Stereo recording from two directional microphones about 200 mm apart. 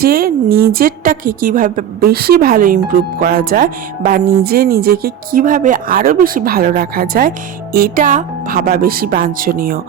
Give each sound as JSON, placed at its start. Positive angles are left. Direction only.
{"t": 0.0, "sound": "a woman's voice", "side_deg": -50}